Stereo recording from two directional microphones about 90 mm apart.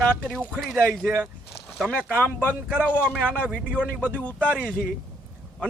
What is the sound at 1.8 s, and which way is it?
Speech, 15° right (ahead or behind).